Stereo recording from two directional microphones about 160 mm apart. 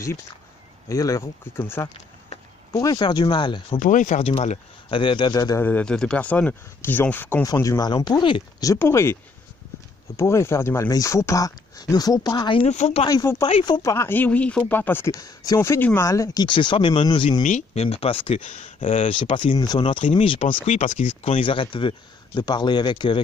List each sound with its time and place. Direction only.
0.8 s speech: 20° left (ahead or behind)
3.8 s speech: 55° left (ahead or behind)
4.2 s speech: 40° left (ahead or behind); by 5.6 s 25° left (ahead or behind)
5.6 s speech: 10° left (ahead or behind); by 12.6 s 30° left (ahead or behind)
12.6 s speech: 40° left (ahead or behind)
13.1 s speech: 20° left (ahead or behind)
13.4 s speech: 35° left (ahead or behind); by 16.4 s 20° left (ahead or behind)
16.4 s speech: 30° left (ahead or behind)
17.4 s speech: 50° left (ahead or behind); by 20.5 s 35° left (ahead or behind)
20.6 s speech: 55° left (ahead or behind)
21.2 s speech: 35° left (ahead or behind)